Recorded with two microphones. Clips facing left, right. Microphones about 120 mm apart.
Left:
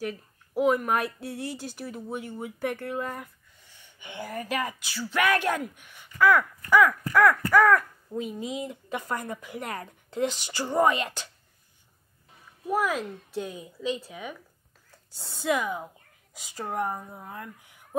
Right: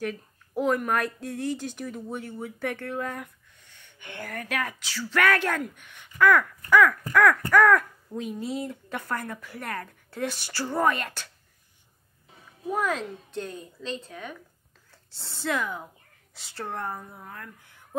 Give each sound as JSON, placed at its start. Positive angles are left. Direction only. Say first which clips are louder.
{"t": 0.0, "sound": "speech", "louder": "right 1 dB", "side_deg": 10}
{"t": 12.7, "sound": "speech", "louder": "left 1 dB", "side_deg": 5}